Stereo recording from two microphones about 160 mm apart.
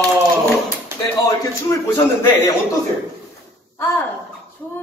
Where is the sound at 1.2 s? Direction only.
20° left (ahead or behind).